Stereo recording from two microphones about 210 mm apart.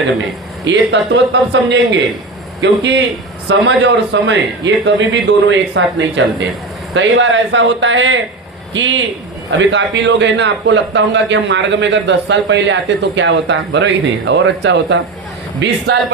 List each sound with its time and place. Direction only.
0.6 s a man's voice: 60° right (ahead or behind)